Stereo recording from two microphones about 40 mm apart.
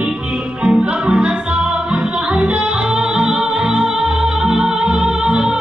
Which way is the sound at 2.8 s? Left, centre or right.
Centre.